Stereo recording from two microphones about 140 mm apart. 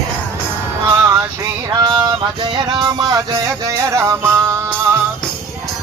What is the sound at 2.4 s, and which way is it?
Music, 30° right (ahead or behind).